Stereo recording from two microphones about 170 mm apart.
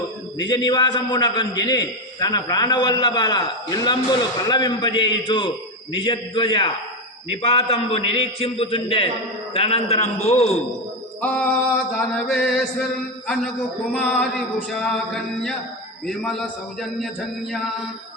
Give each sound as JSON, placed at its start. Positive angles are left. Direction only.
{"t": 0.3, "sound": "a man's voice", "side_deg": 25}
{"t": 11.9, "sound": "a man's voice", "side_deg": 5}